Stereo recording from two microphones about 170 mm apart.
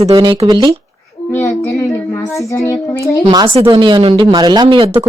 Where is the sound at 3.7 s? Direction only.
30° right (ahead or behind).